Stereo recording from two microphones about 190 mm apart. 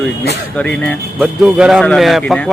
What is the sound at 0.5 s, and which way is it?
Speech, 5° left (ahead or behind).